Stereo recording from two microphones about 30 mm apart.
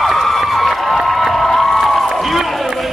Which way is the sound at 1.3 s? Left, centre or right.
Centre.